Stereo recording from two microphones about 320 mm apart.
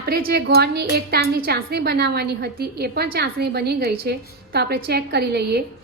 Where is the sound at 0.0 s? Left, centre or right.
Right.